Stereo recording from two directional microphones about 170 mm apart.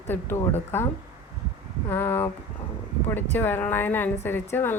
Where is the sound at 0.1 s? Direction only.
15° left (ahead or behind).